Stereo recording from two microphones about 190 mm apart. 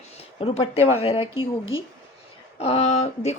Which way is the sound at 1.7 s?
90° left.